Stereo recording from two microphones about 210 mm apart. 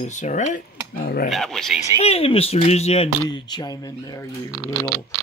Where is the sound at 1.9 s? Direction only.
30° left (ahead or behind).